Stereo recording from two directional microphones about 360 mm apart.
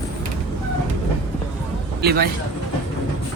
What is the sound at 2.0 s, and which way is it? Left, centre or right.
Speech, right.